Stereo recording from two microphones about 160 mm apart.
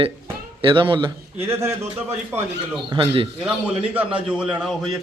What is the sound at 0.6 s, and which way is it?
Speech, 30° right (ahead or behind).